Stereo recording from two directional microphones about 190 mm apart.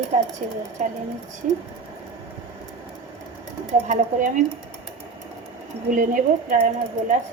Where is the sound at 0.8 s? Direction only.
40° right (ahead or behind).